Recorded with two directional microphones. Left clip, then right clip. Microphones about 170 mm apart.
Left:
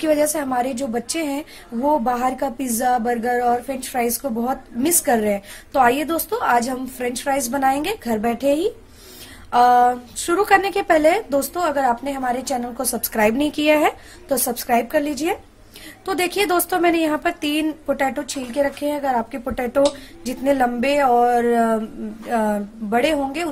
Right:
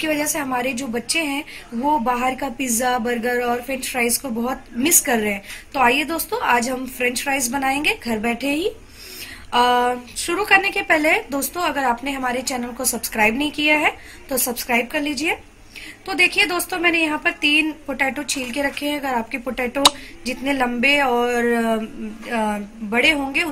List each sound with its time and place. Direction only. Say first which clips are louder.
0.0 s a woman's voice: left 4 dB; 45° left (ahead or behind)